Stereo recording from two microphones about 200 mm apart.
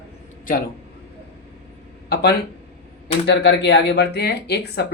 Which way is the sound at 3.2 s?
60° left (ahead or behind).